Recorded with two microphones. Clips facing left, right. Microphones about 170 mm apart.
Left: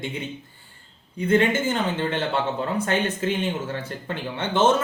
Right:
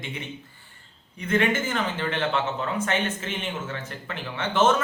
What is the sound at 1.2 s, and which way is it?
Speech, 30° left (ahead or behind).